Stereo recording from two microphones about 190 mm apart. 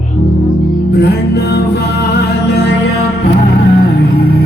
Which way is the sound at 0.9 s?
60° left (ahead or behind).